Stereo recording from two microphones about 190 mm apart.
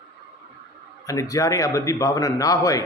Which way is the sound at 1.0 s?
15° left (ahead or behind).